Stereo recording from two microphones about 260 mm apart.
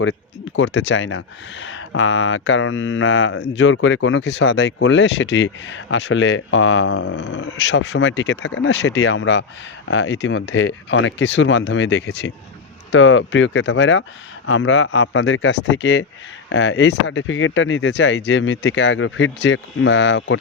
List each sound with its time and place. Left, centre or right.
0.0 s speech: left